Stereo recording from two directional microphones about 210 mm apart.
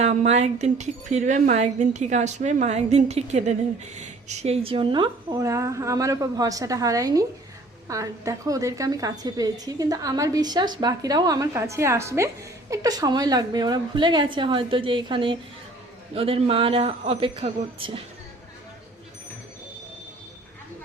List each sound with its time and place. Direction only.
0.0 s a woman's voice: 35° right (ahead or behind)